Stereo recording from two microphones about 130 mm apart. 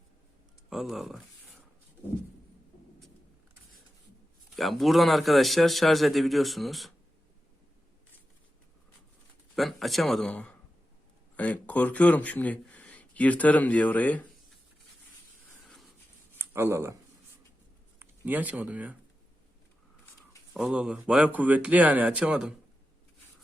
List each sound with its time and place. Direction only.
0.7 s speech: centre (ahead or behind)
4.5 s a man's voice: centre (ahead or behind)
9.6 s a man's voice: centre (ahead or behind)
16.4 s speech: 20° right (ahead or behind)
18.0 s speech: 15° right (ahead or behind)
20.5 s speech: 5° right (ahead or behind)